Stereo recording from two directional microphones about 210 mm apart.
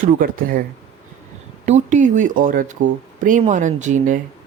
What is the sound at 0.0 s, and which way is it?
Speech, 40° right (ahead or behind).